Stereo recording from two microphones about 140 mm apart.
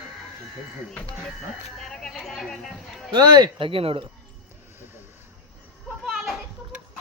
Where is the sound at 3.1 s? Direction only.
30° right (ahead or behind).